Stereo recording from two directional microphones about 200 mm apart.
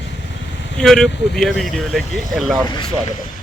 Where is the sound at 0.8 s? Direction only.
Centre (ahead or behind).